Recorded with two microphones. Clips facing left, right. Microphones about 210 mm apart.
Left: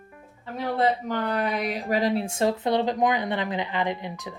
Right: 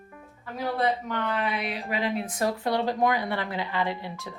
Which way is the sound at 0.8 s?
35° left (ahead or behind).